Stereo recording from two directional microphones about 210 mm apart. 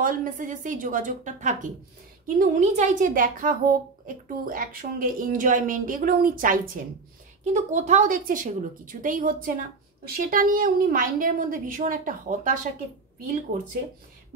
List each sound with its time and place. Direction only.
0.0 s a woman's voice: 40° right (ahead or behind)